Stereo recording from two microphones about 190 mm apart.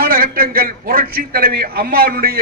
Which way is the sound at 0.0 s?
50° right (ahead or behind).